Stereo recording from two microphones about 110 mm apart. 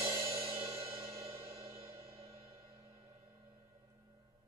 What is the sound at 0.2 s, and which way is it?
Music, 30° right (ahead or behind).